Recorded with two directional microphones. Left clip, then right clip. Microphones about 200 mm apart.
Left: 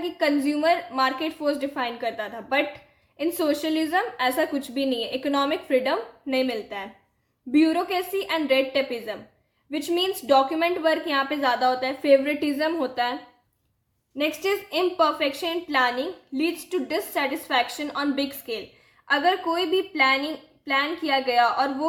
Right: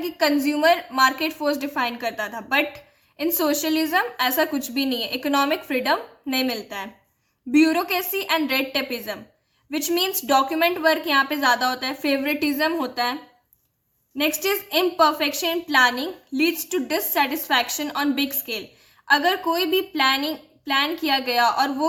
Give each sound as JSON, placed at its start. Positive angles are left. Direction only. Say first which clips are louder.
{"t": 0.2, "sound": "a woman's voice", "louder": "right 3 dB", "side_deg": -40}
{"t": 14.2, "sound": "a woman's voice", "louder": "right 2 dB", "side_deg": -40}